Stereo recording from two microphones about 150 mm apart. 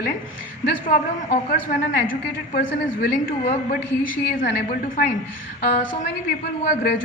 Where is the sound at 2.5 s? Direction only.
90° left.